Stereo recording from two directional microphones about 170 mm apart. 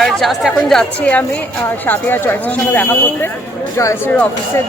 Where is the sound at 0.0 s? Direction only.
Centre (ahead or behind).